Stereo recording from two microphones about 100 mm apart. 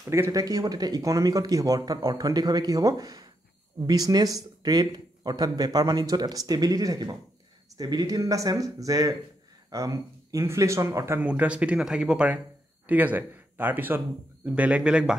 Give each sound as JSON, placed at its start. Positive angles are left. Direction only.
{"t": 0.0, "sound": "speech", "side_deg": -25}
{"t": 11.1, "sound": "a man's voice", "side_deg": -15}